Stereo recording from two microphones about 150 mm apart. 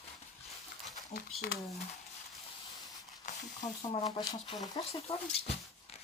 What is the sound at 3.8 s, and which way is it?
Speech, 35° left (ahead or behind).